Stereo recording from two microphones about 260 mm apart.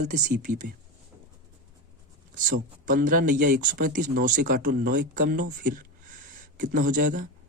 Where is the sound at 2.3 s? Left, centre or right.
Right.